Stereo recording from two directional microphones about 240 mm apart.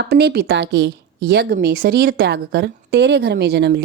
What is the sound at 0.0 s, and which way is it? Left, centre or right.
A woman's voice, right.